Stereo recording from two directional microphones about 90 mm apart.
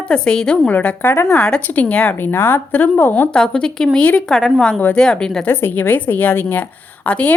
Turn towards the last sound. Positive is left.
turn(degrees=15)  # may be behind; listen again after turning